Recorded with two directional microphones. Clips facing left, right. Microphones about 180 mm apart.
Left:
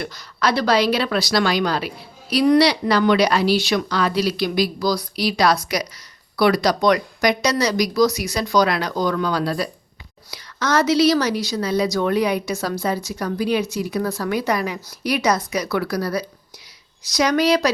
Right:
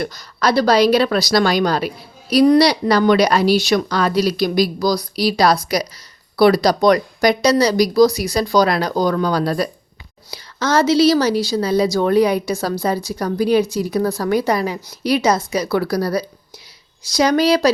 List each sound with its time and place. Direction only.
0.0 s speech: 40° right (ahead or behind)
10.3 s speech: 30° right (ahead or behind)